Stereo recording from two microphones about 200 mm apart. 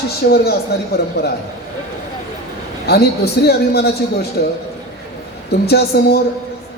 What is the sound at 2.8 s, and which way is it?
A man's voice, 55° left (ahead or behind).